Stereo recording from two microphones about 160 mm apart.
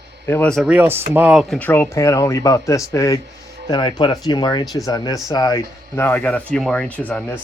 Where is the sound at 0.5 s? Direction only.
5° right (ahead or behind).